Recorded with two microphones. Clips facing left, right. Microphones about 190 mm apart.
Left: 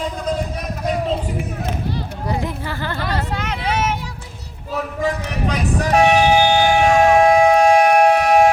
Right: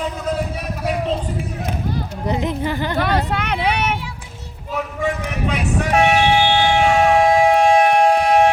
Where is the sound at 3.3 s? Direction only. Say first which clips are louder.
Right 2 dB; 60° right (ahead or behind).